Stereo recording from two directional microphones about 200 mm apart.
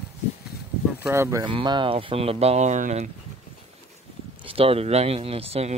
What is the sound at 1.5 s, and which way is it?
Speech, 25° right (ahead or behind).